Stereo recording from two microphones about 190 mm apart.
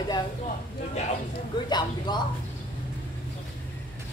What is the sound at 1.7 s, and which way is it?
Speech, 20° left (ahead or behind).